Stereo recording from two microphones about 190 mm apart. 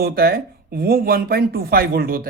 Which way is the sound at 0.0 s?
55° right (ahead or behind).